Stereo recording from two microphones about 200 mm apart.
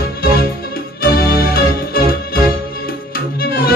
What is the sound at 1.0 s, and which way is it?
Music, 50° left (ahead or behind).